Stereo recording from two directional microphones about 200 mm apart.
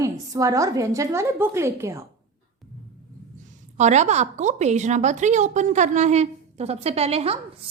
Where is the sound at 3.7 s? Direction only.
35° right (ahead or behind).